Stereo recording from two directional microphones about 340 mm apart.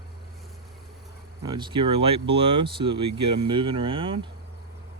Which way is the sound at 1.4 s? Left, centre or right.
Centre.